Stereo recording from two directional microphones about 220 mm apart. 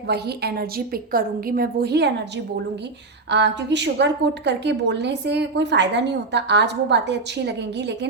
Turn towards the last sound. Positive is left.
turn(degrees=-50)  # may be behind; listen again after turning